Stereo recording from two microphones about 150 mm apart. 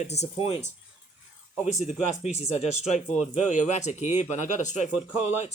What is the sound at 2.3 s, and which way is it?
A man's voice, 45° left (ahead or behind).